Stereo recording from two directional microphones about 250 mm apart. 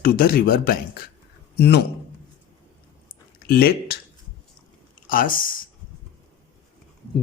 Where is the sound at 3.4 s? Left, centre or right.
Left.